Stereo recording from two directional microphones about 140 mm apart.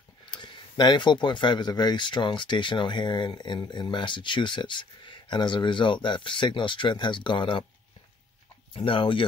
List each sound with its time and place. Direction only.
0.2 s speech: 35° left (ahead or behind)
8.7 s speech: 40° left (ahead or behind)